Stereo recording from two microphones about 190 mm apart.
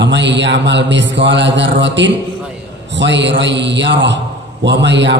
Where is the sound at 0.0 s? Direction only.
70° right (ahead or behind).